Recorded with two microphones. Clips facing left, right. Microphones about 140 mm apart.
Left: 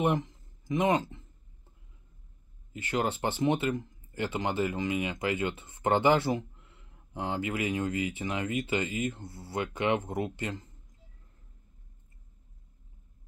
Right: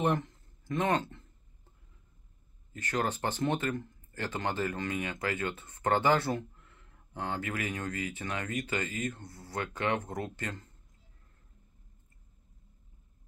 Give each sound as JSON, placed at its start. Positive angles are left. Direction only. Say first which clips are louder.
{"t": 0.0, "sound": "speech", "louder": "left 2 dB", "side_deg": 15}
{"t": 2.7, "sound": "speech", "louder": "left 2 dB", "side_deg": 15}